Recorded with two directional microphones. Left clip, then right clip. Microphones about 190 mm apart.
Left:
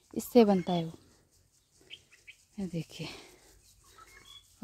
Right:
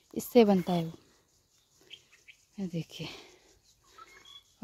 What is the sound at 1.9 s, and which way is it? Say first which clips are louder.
Bird: left 1 dB; 60° left (ahead or behind).